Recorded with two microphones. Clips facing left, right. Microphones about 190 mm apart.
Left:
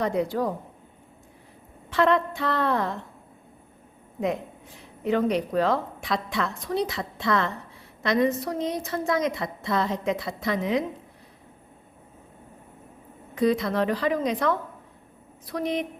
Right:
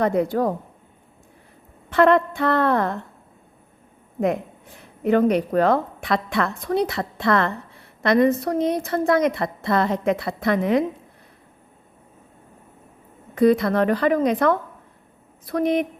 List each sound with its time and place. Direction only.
0.0 s speech: 55° right (ahead or behind)
1.9 s a woman's voice: 55° right (ahead or behind)
4.8 s a woman's voice: 55° right (ahead or behind)
13.3 s a woman's voice: 55° right (ahead or behind)